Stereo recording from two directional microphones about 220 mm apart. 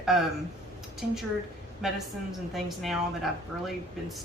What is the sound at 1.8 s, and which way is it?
Speech, centre (ahead or behind).